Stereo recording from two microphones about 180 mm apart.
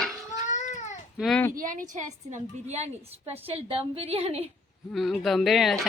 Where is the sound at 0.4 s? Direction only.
40° left (ahead or behind).